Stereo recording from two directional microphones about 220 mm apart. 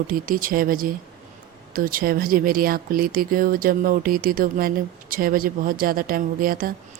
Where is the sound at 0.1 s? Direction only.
40° right (ahead or behind).